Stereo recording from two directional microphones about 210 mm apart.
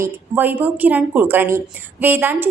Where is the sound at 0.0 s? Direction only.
10° right (ahead or behind).